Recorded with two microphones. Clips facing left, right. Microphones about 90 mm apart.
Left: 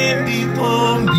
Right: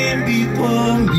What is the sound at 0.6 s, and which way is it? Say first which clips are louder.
Music: left 3 dB; 90° left.